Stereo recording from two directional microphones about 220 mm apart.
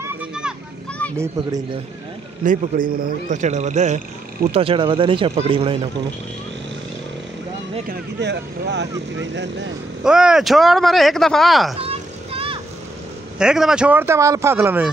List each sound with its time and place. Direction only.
0.0 s a sound: 10° right (ahead or behind)
1.1 s speech: 10° right (ahead or behind)
2.4 s speech: 40° right (ahead or behind)
7.9 s speech: 50° right (ahead or behind)
10.0 s speech: 5° right (ahead or behind)
11.8 s vehicle: 25° right (ahead or behind)
13.4 s speech: 5° right (ahead or behind)